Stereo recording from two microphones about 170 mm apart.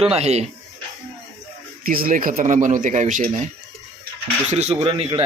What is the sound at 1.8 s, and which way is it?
Speech, 60° right (ahead or behind).